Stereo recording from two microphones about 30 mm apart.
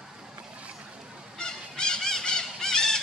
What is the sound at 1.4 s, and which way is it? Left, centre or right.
Goose, left.